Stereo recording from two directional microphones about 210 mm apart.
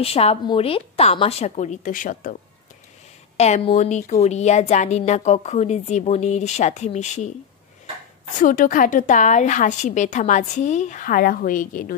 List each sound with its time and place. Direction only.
0.0 s a woman's voice: 30° left (ahead or behind)
3.3 s speech: 30° left (ahead or behind)
8.4 s speech: 40° left (ahead or behind)